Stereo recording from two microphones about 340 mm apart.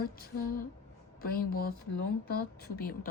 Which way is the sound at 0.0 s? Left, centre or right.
Left.